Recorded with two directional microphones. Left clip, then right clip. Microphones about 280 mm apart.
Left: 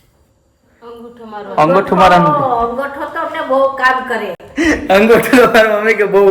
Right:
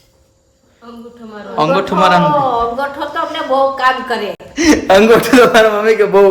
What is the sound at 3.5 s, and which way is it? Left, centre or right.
A man's voice, centre.